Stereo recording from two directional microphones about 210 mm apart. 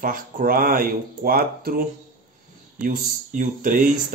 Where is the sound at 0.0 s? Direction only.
40° right (ahead or behind).